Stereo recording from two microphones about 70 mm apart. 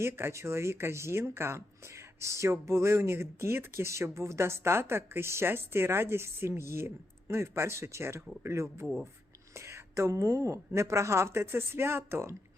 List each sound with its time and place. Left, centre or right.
0.0 s speech: right
8.8 s speech: centre
9.6 s speech: right